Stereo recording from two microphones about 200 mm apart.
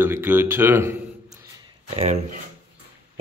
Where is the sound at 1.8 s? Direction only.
30° right (ahead or behind).